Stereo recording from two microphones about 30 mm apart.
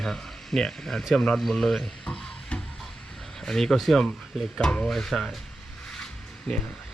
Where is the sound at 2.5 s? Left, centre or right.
Left.